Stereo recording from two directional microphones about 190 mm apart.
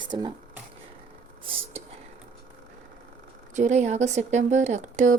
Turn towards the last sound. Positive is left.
turn(degrees=-40)  # may be behind; listen again after turning